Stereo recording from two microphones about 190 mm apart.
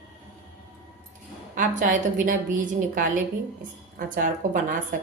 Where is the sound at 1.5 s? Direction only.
40° right (ahead or behind).